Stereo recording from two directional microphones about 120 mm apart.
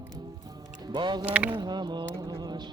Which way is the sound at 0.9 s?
40° right (ahead or behind).